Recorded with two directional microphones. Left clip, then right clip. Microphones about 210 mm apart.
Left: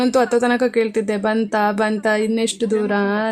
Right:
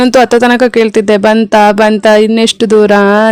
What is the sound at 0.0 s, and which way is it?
Speech, 45° right (ahead or behind).